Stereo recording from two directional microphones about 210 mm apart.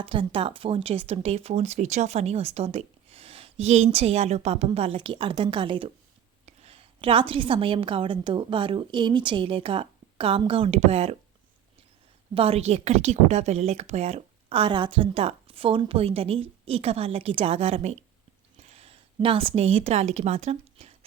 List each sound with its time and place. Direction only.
0.0 s speech: 25° right (ahead or behind)
12.3 s speech: 30° right (ahead or behind)